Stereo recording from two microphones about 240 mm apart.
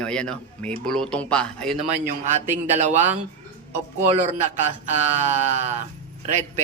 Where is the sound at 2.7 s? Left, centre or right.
Right.